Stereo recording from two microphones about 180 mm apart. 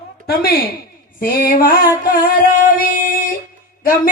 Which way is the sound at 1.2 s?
50° left (ahead or behind).